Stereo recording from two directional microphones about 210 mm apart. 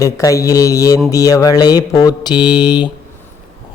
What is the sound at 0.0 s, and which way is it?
Mantra, 15° left (ahead or behind).